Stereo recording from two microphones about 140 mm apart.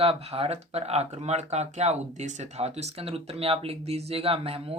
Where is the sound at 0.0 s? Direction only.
45° right (ahead or behind).